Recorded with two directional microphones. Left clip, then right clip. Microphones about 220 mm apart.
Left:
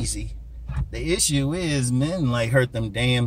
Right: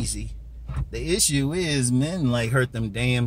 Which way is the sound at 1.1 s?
15° right (ahead or behind).